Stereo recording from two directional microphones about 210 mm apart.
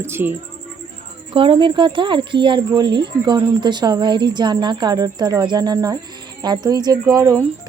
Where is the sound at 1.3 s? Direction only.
25° right (ahead or behind).